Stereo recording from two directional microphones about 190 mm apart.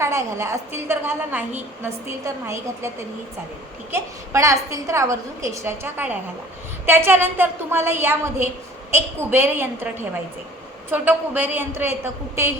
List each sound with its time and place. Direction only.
0.0 s a woman's voice: 15° right (ahead or behind)
3.9 s a woman's voice: 15° right (ahead or behind)